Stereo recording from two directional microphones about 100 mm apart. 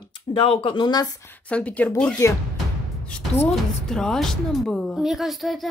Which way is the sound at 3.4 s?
5° left (ahead or behind).